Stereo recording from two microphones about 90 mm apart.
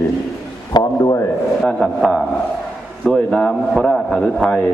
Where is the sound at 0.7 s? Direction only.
45° left (ahead or behind).